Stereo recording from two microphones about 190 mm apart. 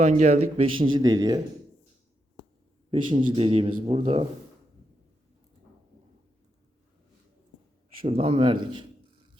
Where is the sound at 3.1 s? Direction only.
25° right (ahead or behind).